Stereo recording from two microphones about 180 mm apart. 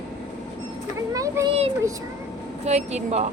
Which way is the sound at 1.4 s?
15° right (ahead or behind).